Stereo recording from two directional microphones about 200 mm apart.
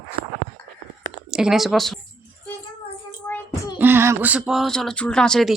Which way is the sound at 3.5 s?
20° left (ahead or behind).